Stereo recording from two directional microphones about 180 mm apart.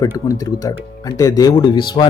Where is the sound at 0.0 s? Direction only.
20° left (ahead or behind).